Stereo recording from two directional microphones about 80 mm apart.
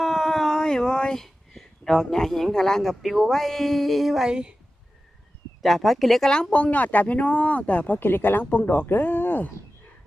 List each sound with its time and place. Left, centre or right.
0.0 s speech: centre
5.6 s speech: centre
6.5 s speech: centre